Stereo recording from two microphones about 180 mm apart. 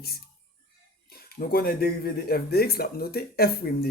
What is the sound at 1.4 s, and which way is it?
Speech, 60° left (ahead or behind).